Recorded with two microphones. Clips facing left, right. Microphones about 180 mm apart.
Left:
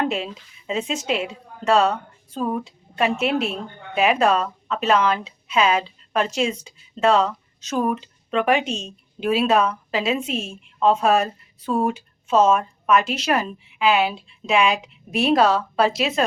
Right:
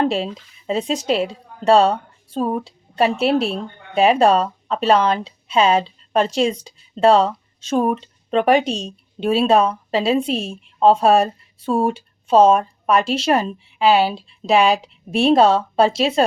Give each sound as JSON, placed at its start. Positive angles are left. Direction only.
{"t": 0.0, "sound": "a woman's voice", "side_deg": -30}